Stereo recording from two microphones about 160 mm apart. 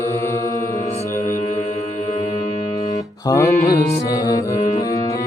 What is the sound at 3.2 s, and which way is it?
Music, 20° left (ahead or behind).